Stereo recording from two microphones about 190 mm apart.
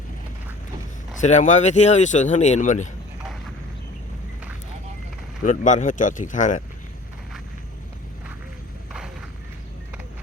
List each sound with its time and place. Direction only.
1.2 s speech: 40° left (ahead or behind)
5.4 s speech: 40° left (ahead or behind)